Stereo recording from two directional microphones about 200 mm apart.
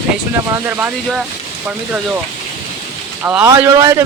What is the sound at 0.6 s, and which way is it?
Speech, 5° right (ahead or behind).